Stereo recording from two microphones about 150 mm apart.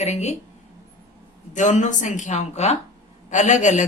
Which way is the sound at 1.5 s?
55° left (ahead or behind).